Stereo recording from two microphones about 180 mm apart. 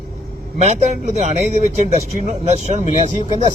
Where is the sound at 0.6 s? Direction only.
35° right (ahead or behind).